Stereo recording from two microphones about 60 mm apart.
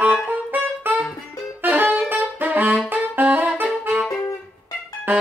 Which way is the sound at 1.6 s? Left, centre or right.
Right.